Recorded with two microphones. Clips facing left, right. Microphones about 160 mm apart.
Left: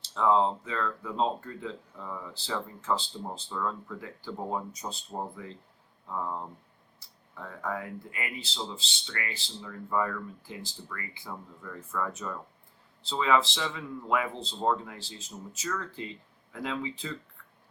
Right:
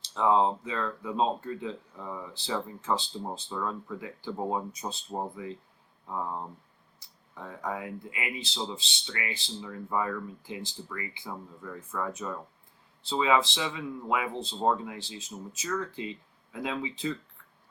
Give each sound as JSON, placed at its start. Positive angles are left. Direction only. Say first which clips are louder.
{"t": 0.1, "sound": "speech", "louder": "even", "side_deg": -15}